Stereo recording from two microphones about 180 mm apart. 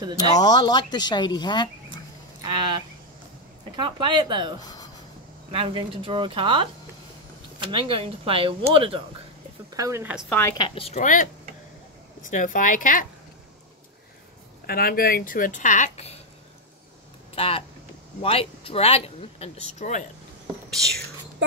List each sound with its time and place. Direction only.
0.4 s speech: 20° left (ahead or behind)
2.4 s speech: 25° right (ahead or behind)
4.6 s speech: 20° left (ahead or behind)
5.5 s speech: 30° right (ahead or behind)
9.7 s speech: 20° right (ahead or behind)
10.6 s speech: 30° left (ahead or behind); by 13.0 s 50° left (ahead or behind)
14.7 s speech: 55° left (ahead or behind); by 16.2 s 40° left (ahead or behind)
17.4 s speech: 30° left (ahead or behind)
20.7 s speech: 5° left (ahead or behind)